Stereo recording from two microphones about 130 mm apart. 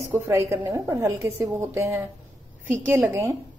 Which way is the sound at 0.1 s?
20° right (ahead or behind).